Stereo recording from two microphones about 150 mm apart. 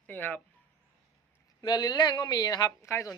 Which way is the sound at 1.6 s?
25° left (ahead or behind).